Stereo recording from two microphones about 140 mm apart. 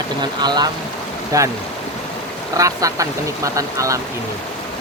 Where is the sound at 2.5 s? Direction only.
25° right (ahead or behind).